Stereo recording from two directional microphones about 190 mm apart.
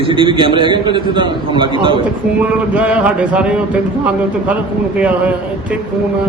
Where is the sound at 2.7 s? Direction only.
5° right (ahead or behind).